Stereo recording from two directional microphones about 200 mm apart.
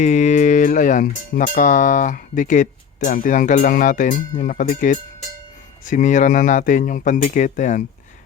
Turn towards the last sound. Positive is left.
turn(degrees=40)  # may be behind; listen again after turning